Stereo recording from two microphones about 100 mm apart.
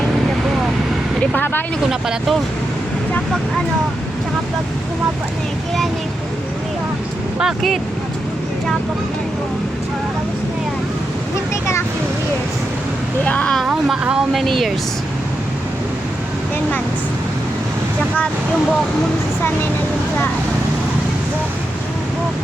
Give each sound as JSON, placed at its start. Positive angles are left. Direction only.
{"t": 1.2, "sound": "speech", "side_deg": 15}
{"t": 1.9, "sound": "speech", "side_deg": -5}
{"t": 7.3, "sound": "speech", "side_deg": 0}
{"t": 13.2, "sound": "speech", "side_deg": 15}
{"t": 13.7, "sound": "speech", "side_deg": -5}
{"t": 14.4, "sound": "speech", "side_deg": 5}